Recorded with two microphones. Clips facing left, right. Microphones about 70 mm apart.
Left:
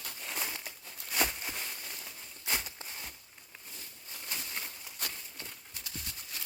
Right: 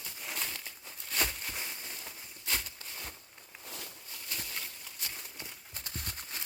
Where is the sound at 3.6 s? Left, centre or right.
Right.